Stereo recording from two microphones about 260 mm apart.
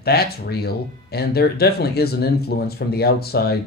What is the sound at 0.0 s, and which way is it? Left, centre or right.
Speech, left.